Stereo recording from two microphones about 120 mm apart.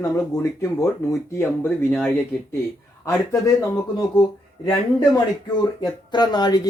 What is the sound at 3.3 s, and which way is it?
Speech, 30° left (ahead or behind).